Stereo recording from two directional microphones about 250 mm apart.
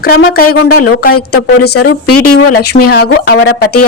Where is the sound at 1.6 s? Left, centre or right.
Left.